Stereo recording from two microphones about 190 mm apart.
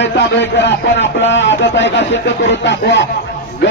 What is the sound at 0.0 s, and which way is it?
A man's voice, 70° left (ahead or behind).